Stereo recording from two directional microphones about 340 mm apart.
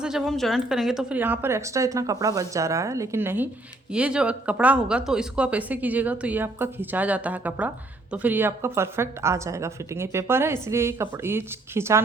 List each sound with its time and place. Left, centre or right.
0.0 s speech: centre